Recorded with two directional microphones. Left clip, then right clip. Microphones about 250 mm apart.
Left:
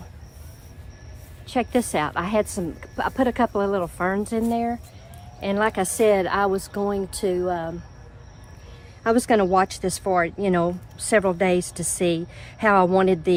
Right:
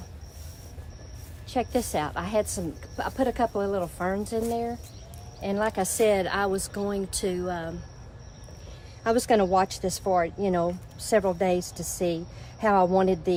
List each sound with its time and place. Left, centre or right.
1.5 s speech: left
9.0 s speech: left